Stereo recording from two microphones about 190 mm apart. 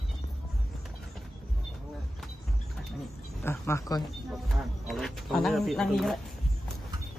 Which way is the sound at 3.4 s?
15° left (ahead or behind).